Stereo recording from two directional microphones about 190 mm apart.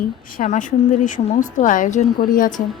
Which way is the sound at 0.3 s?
40° left (ahead or behind).